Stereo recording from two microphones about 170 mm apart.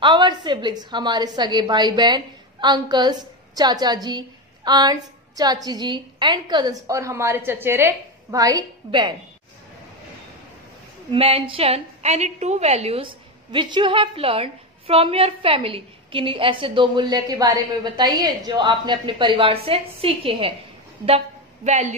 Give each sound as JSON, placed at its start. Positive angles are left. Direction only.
{"t": 0.0, "sound": "a woman's voice", "side_deg": -25}
{"t": 11.1, "sound": "a woman's voice", "side_deg": -35}
{"t": 21.6, "sound": "a woman's voice", "side_deg": -45}